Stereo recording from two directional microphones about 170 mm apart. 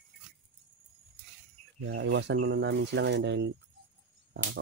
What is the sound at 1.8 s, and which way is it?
Speech, 90° right.